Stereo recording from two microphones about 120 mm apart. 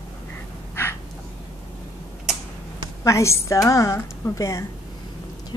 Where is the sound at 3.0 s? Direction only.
25° left (ahead or behind).